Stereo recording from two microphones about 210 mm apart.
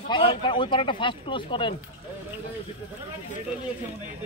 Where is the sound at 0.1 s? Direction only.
25° left (ahead or behind).